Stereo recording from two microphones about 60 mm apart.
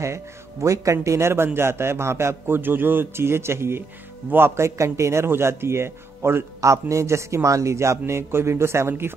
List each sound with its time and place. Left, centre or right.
0.0 s a man's voice: right
6.6 s a man's voice: right